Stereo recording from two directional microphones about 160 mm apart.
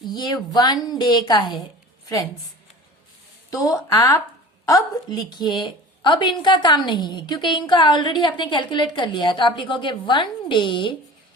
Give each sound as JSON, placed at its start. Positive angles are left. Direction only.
{"t": 0.0, "sound": "a woman's voice", "side_deg": 25}
{"t": 3.5, "sound": "a woman's voice", "side_deg": 20}